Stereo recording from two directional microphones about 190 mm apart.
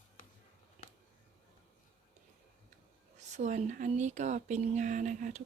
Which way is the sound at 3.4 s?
40° right (ahead or behind).